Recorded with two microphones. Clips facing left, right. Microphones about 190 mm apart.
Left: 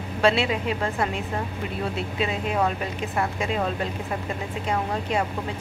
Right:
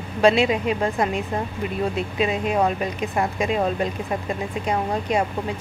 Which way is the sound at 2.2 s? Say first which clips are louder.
Right 4 dB; 15° right (ahead or behind).